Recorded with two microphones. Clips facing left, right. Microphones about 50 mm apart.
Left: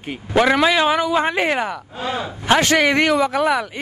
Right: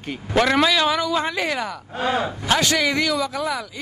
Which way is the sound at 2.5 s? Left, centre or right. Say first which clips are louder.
Left 6 dB; left.